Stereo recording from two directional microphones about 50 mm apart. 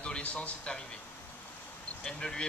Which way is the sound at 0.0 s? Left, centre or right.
Left.